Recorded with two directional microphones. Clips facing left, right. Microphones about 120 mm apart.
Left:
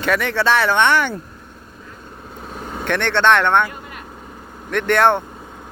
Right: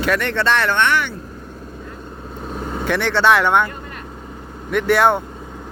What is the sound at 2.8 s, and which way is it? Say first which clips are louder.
Speech: even; 5° right (ahead or behind).